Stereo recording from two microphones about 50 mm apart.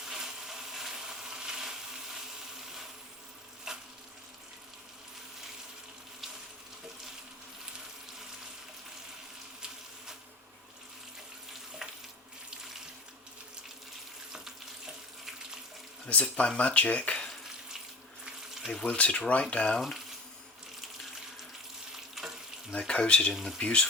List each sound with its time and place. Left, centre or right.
0.0 s a sound: centre
3.7 s frying: centre
11.8 s frying: centre
14.3 s water tap: centre
16.0 s speech: left
18.9 s speech: left
22.1 s water: centre
22.9 s speech: left
23.3 s speech: centre
23.6 s speech: centre